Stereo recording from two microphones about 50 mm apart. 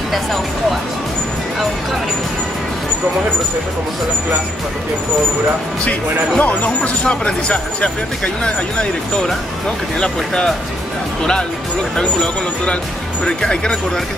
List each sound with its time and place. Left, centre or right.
0.1 s speech: centre
5.9 s speech: left
12.0 s speech: centre